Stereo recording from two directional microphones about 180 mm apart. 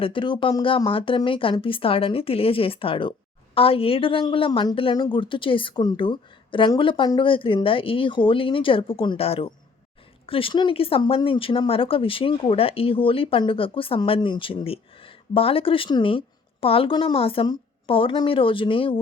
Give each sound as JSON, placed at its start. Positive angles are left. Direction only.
{"t": 0.0, "sound": "speech", "side_deg": 25}